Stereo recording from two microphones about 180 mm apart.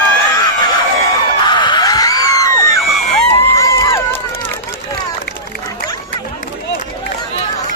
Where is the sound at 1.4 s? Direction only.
25° left (ahead or behind).